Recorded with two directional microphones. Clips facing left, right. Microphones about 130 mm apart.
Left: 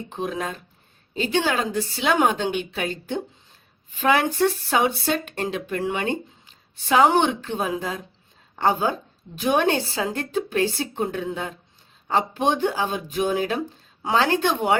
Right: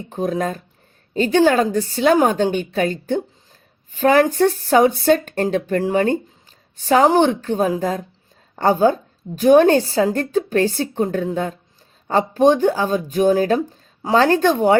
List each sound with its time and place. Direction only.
0.1 s a woman's voice: 40° right (ahead or behind)